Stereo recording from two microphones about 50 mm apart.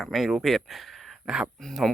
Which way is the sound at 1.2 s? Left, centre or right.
Centre.